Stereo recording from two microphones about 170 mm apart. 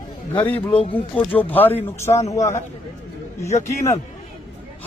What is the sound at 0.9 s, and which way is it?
Speech, 10° left (ahead or behind).